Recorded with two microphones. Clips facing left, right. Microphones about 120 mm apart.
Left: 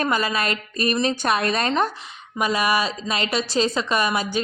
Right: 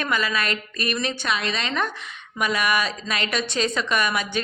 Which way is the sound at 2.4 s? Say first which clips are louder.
Left 2 dB; 30° left (ahead or behind).